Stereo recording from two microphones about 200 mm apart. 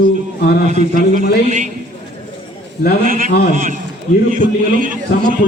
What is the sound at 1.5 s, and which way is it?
Speech, 40° right (ahead or behind).